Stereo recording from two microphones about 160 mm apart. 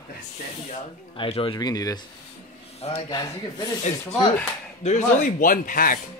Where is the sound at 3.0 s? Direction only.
25° left (ahead or behind).